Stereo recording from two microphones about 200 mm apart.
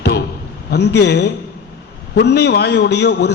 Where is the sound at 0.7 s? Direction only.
55° left (ahead or behind).